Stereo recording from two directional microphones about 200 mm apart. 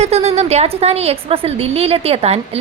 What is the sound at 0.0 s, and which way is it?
A woman's voice, 30° right (ahead or behind).